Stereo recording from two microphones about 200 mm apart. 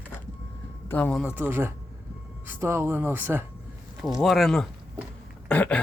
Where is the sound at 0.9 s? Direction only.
5° left (ahead or behind).